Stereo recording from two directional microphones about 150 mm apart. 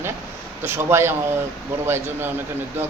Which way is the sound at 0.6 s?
15° right (ahead or behind).